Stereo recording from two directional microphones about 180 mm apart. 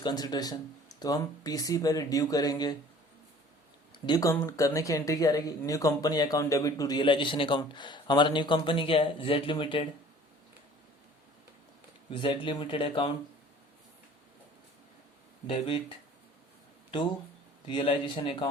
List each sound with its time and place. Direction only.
0.0 s speech: 20° left (ahead or behind)
3.9 s speech: 25° left (ahead or behind)
12.1 s speech: 25° left (ahead or behind)
15.4 s speech: 30° left (ahead or behind)
17.7 s speech: 25° left (ahead or behind)